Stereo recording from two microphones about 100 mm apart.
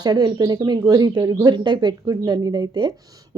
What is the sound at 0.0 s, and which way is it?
A woman's voice, 45° right (ahead or behind).